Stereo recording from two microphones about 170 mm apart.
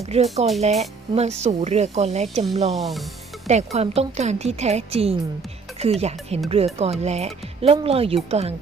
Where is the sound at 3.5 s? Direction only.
40° right (ahead or behind).